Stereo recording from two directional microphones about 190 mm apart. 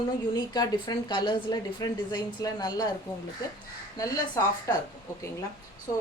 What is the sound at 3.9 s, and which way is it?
Speech, 20° left (ahead or behind).